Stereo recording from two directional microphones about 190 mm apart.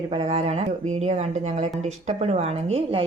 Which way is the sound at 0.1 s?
30° right (ahead or behind).